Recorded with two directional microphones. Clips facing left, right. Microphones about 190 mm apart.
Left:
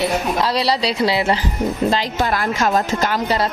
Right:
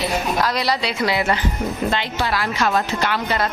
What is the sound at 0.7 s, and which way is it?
Speech, 30° left (ahead or behind).